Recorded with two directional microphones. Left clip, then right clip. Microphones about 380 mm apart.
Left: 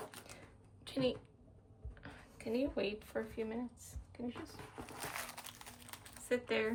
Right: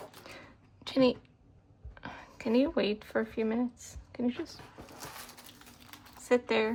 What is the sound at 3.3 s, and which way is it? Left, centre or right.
Speech, right.